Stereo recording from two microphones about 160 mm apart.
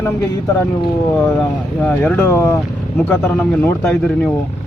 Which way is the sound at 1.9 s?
10° left (ahead or behind).